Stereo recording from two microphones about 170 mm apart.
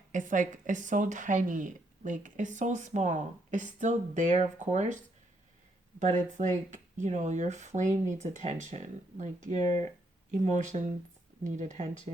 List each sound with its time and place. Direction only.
0.1 s speech: 50° right (ahead or behind)
6.0 s speech: 45° right (ahead or behind)
9.5 s speech: 25° left (ahead or behind)
10.3 s speech: 45° right (ahead or behind)